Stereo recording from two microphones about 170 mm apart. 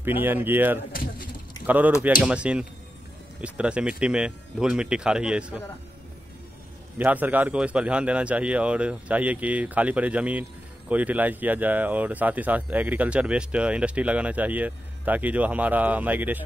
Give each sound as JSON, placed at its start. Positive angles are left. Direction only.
{"t": 0.0, "sound": "speech", "side_deg": -10}
{"t": 2.2, "sound": "speech", "side_deg": -5}
{"t": 7.0, "sound": "speech", "side_deg": -10}